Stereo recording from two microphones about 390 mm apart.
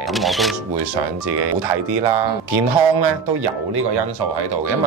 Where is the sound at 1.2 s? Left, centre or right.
Right.